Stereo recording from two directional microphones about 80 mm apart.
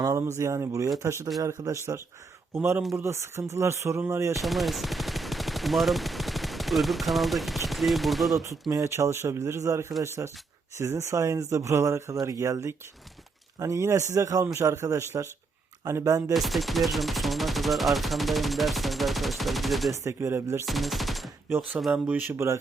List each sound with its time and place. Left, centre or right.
0.0 s speech: right
1.6 s speech: right
2.9 s speech: right
4.4 s speech: centre
8.7 s speech: right
16.3 s gunshot: centre
19.9 s speech: right
20.7 s gunshot: centre
22.0 s speech: right